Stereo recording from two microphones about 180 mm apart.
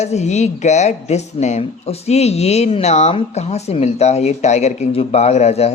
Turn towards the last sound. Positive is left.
turn(degrees=35)  # may be behind; listen again after turning